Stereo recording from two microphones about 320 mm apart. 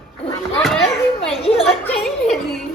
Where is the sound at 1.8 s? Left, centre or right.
Centre.